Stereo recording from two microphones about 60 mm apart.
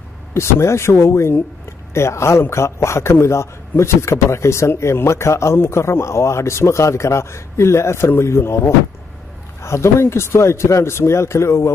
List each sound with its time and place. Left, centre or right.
0.3 s a man's voice: left